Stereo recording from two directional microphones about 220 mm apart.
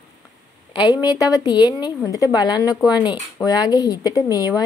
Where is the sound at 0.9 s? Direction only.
15° left (ahead or behind).